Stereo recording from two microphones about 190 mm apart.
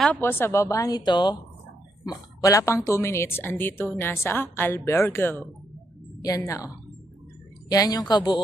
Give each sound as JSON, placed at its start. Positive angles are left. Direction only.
{"t": 0.0, "sound": "a woman's voice", "side_deg": 10}
{"t": 7.7, "sound": "a woman's voice", "side_deg": 20}